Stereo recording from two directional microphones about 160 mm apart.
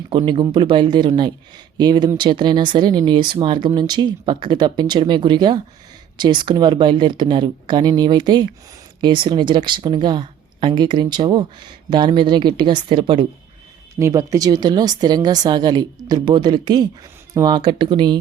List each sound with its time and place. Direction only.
0.1 s speech: 30° right (ahead or behind)
14.0 s speech: 20° right (ahead or behind)